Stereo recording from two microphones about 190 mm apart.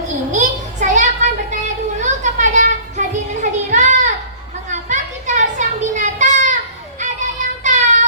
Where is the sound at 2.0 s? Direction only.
40° right (ahead or behind).